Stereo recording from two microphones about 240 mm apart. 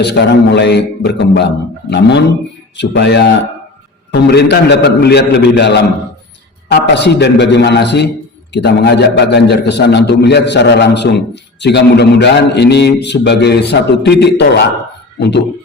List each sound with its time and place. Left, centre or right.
0.0 s a man's voice: left